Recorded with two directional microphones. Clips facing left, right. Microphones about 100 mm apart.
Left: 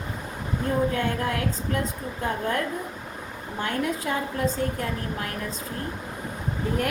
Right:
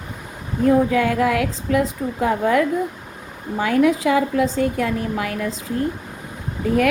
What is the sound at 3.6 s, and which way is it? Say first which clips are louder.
A woman's voice: right 11 dB; 90° right.